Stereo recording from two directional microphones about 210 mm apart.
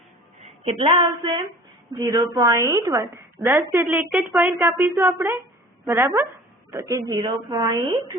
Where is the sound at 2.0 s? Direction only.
15° right (ahead or behind).